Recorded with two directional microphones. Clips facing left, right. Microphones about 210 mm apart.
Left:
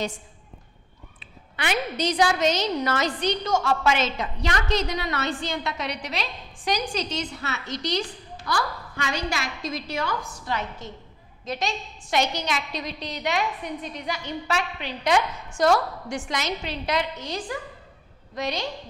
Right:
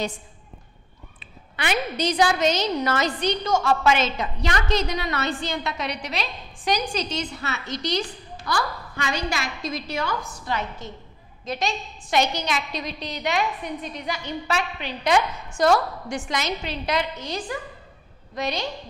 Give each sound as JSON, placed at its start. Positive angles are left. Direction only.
{"t": 1.2, "sound": "a woman's voice", "side_deg": -15}
{"t": 15.7, "sound": "a woman's voice", "side_deg": -30}
{"t": 16.3, "sound": "a woman's voice", "side_deg": -10}